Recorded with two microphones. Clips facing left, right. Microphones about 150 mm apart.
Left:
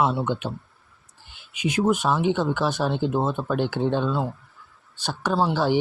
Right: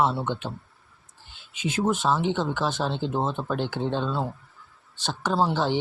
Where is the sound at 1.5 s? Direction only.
15° left (ahead or behind).